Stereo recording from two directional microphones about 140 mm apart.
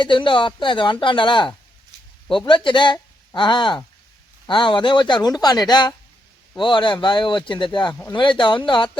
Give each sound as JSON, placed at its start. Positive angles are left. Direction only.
{"t": 0.0, "sound": "speech", "side_deg": 35}